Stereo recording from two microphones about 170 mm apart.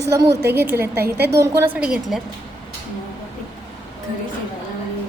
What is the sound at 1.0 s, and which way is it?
Speech, 70° right (ahead or behind).